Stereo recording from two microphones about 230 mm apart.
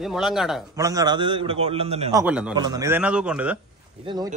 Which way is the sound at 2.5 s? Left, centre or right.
Centre.